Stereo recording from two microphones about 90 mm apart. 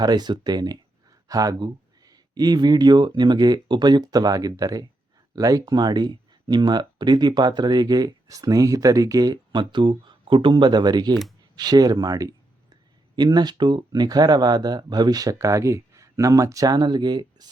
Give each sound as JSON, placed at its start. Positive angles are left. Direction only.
{"t": 0.0, "sound": "speech", "side_deg": -50}